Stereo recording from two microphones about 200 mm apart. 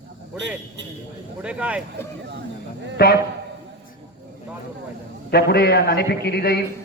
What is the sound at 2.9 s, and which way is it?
Speech, 50° left (ahead or behind).